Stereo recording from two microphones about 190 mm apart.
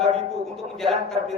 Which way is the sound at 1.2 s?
30° right (ahead or behind).